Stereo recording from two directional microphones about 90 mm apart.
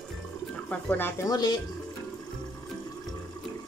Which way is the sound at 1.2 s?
45° left (ahead or behind).